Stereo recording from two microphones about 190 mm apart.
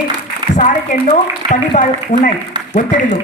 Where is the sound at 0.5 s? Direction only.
40° left (ahead or behind).